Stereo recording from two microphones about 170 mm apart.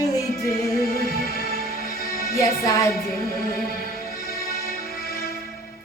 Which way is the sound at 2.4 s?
20° left (ahead or behind).